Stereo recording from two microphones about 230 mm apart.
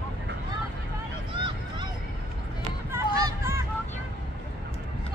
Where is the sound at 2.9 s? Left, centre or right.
Centre.